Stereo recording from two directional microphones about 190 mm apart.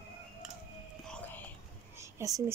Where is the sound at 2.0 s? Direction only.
15° right (ahead or behind).